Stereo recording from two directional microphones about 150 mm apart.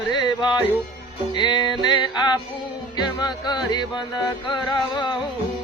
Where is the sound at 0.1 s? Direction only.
30° left (ahead or behind).